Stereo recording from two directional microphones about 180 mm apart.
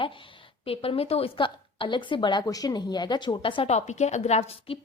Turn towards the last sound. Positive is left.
turn(degrees=35)  # may be behind; listen again after turning